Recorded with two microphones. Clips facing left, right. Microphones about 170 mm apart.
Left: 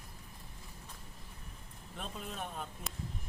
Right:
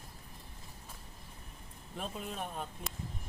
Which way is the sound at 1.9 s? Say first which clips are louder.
Right 3 dB; centre (ahead or behind).